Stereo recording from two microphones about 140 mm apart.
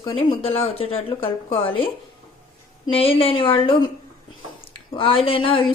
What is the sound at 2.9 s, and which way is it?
Speech, 40° left (ahead or behind).